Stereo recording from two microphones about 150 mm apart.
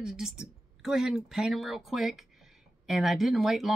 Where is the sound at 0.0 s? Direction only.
5° right (ahead or behind).